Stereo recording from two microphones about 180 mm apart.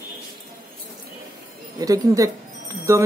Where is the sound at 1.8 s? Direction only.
20° right (ahead or behind).